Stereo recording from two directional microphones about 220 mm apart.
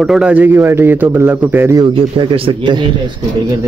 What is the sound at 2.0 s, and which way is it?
Speech, 25° right (ahead or behind).